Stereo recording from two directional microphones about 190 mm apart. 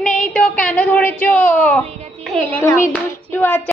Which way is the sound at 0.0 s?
5° left (ahead or behind).